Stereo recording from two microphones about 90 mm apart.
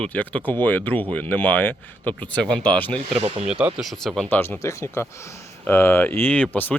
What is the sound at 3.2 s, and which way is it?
Speech, 90° right.